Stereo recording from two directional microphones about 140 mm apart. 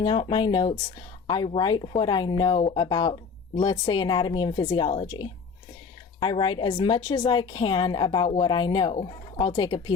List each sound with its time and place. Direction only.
0.0 s a woman's voice: 35° left (ahead or behind)